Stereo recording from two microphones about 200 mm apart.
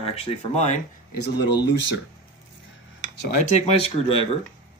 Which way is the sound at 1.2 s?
55° left (ahead or behind).